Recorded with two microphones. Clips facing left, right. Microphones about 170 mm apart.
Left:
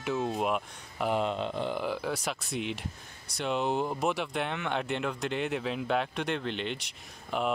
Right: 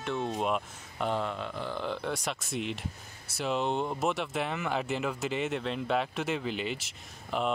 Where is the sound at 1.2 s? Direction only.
20° left (ahead or behind).